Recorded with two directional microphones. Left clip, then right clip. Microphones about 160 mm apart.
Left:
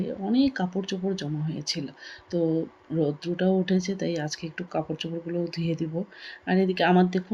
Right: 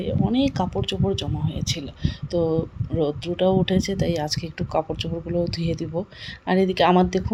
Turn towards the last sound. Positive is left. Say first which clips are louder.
# right 4 dB
turn(degrees=-50)  # may be behind; listen again after turning